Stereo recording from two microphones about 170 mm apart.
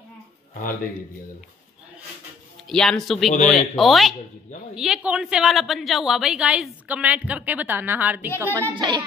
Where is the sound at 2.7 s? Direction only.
Centre (ahead or behind).